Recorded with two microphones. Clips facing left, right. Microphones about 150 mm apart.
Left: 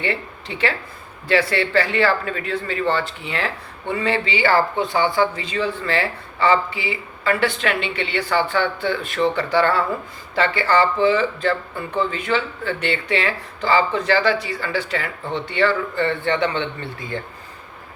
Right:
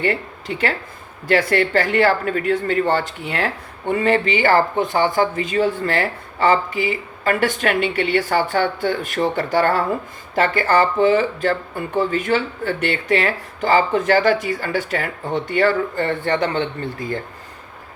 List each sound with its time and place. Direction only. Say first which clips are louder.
0.0 s speech: right 4 dB; 45° right (ahead or behind)